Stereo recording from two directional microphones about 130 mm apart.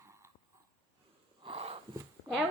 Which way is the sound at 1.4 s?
50° right (ahead or behind).